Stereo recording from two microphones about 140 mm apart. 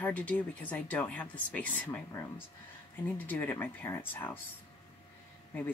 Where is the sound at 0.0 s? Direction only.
10° left (ahead or behind).